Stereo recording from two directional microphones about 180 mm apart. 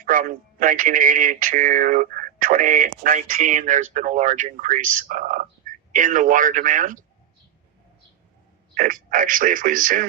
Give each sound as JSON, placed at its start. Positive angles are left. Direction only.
{"t": 0.0, "sound": "speech", "side_deg": -50}
{"t": 8.7, "sound": "speech", "side_deg": -45}